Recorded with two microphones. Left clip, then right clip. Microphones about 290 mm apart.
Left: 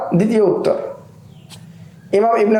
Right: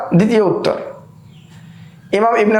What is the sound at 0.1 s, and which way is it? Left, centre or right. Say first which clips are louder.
Speech: right 1 dB; right.